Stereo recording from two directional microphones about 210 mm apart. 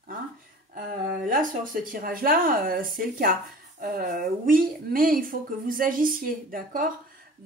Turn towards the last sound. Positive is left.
turn(degrees=-40)  # may be behind; listen again after turning